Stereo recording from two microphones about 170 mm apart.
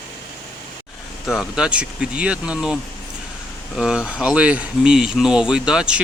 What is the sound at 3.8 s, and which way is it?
Speech, 5° right (ahead or behind).